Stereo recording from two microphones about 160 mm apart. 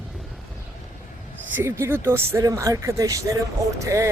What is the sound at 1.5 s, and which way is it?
Speech, 15° right (ahead or behind).